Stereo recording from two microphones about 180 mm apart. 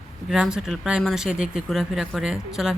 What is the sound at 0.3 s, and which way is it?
Speech, 5° right (ahead or behind).